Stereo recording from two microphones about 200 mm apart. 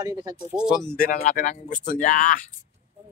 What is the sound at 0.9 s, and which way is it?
Speech, 40° left (ahead or behind).